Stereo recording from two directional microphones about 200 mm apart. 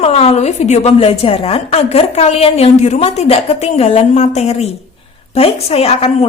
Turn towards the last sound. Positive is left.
turn(degrees=30)  # may be behind; listen again after turning